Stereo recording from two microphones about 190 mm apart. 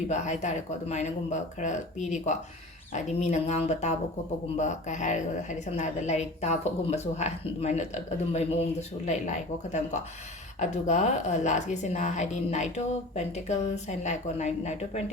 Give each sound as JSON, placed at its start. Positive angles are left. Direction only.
{"t": 0.1, "sound": "a woman's voice", "side_deg": 40}